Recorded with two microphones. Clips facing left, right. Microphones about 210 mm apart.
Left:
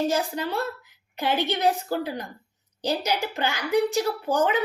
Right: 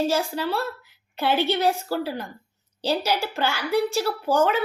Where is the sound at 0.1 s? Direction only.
15° left (ahead or behind).